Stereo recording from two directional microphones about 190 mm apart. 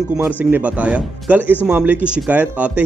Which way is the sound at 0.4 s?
10° right (ahead or behind).